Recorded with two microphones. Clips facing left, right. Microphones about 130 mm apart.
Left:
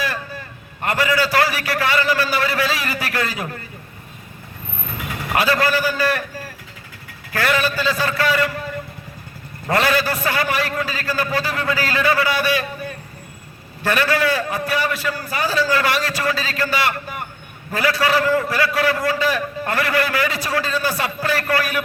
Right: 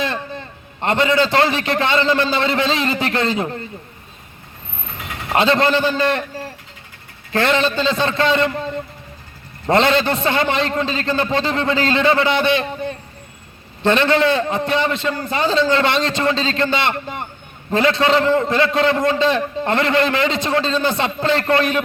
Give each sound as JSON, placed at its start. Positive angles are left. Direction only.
{"t": 0.0, "sound": "a man's voice", "side_deg": -25}
{"t": 5.3, "sound": "a man's voice", "side_deg": -25}